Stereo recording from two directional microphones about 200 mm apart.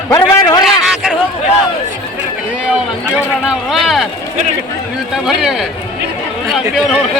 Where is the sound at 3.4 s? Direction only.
Centre (ahead or behind).